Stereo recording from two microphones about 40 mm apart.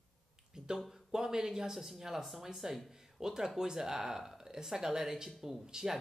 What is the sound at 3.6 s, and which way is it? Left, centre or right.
Speech, centre.